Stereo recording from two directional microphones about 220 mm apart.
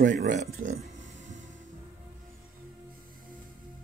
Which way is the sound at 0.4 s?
35° right (ahead or behind).